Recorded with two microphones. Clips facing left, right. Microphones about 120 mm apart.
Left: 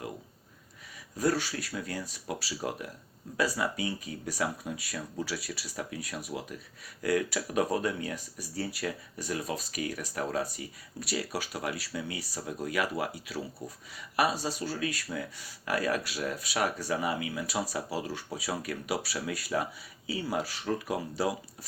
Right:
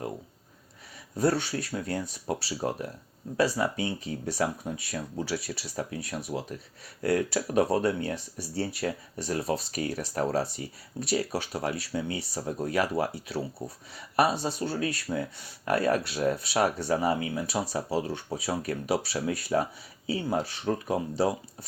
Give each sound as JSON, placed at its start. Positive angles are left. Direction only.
{"t": 1.1, "sound": "speech", "side_deg": -25}